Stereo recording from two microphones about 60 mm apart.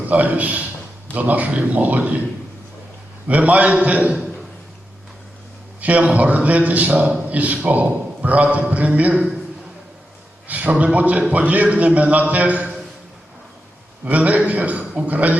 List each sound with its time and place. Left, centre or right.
0.1 s a man's voice: right
3.2 s a man's voice: right
5.8 s a man's voice: right
10.5 s a man's voice: right
14.0 s a man's voice: right